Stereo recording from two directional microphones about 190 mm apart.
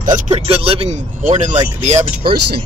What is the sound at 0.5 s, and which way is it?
Speech, 30° right (ahead or behind).